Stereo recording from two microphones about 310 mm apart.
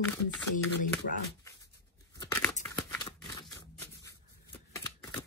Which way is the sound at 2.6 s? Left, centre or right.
Centre.